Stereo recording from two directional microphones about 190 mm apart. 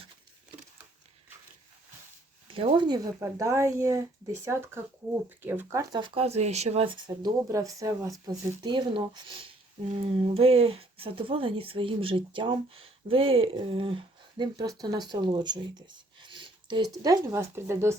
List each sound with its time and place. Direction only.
2.5 s speech: 30° right (ahead or behind)